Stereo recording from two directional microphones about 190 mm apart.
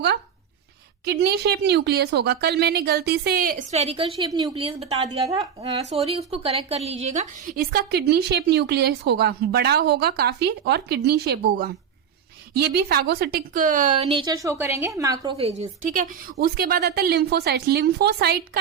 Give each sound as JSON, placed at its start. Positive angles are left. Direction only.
{"t": 1.0, "sound": "a woman's voice", "side_deg": -60}
{"t": 3.7, "sound": "a woman's voice", "side_deg": -35}
{"t": 12.7, "sound": "a woman's voice", "side_deg": -55}
{"t": 14.1, "sound": "a woman's voice", "side_deg": -20}